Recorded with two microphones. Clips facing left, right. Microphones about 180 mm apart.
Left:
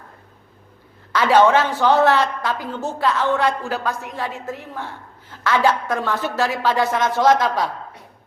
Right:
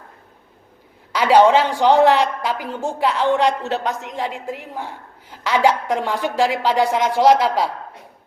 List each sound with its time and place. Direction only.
1.1 s a man's voice: 10° right (ahead or behind)